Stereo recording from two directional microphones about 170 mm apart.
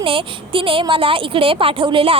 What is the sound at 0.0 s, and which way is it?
A woman's voice, 30° right (ahead or behind).